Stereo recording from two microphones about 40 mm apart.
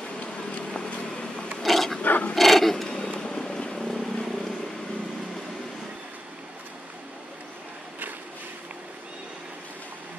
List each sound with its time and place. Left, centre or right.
0.6 s vehicle: left
1.6 s a sound: centre
2.0 s filing: left
2.3 s a sound: centre
2.9 s music: left
3.9 s vehicle: centre